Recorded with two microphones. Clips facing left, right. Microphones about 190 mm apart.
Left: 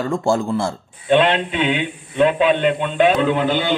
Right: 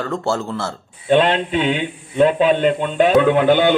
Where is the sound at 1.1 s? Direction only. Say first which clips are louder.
Even; 40° right (ahead or behind).